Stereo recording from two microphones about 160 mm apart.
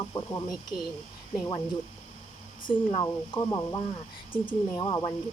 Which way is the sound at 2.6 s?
30° left (ahead or behind).